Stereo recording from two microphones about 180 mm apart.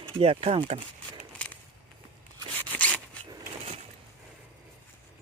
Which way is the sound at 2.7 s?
10° left (ahead or behind).